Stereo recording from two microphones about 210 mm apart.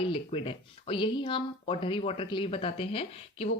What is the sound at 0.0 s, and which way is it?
Speech, 25° left (ahead or behind).